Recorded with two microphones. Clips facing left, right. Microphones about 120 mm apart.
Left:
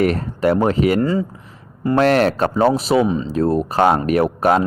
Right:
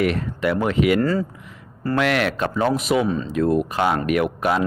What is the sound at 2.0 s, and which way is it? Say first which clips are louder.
Speech: left 6 dB; 40° left (ahead or behind).